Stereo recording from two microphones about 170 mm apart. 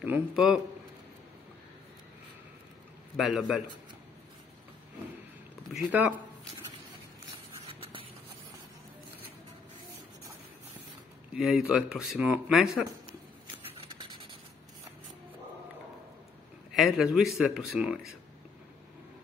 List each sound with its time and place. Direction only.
0.0 s speech: 5° right (ahead or behind)
3.2 s speech: centre (ahead or behind)
5.7 s speech: 5° right (ahead or behind)
7.6 s a sound: 30° right (ahead or behind)
11.3 s speech: centre (ahead or behind)
13.7 s scratch: 30° right (ahead or behind)
16.7 s speech: centre (ahead or behind)